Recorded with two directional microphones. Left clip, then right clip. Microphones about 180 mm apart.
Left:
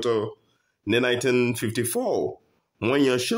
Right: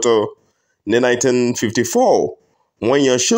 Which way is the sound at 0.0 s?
30° right (ahead or behind).